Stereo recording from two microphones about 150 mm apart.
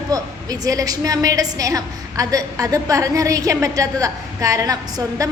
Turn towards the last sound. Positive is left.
turn(degrees=-25)  # may be behind; listen again after turning